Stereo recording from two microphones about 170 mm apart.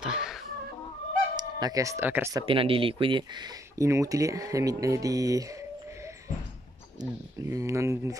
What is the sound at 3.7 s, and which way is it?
Speech, 15° right (ahead or behind).